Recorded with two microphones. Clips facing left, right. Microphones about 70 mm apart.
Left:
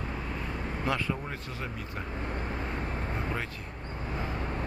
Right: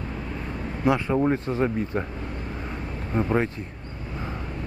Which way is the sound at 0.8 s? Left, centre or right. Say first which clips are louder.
Right 8 dB; right.